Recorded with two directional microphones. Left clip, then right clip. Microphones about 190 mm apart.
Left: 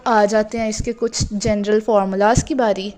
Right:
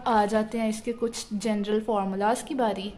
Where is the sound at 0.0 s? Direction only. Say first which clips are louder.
Left 8 dB; 30° left (ahead or behind).